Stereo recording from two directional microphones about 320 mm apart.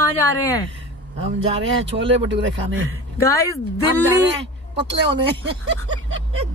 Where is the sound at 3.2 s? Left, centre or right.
Centre.